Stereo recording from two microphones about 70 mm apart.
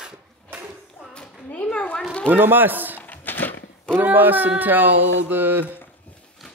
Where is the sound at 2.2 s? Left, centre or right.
Right.